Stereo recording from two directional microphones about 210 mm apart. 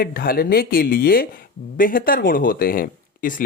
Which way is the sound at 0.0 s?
45° left (ahead or behind).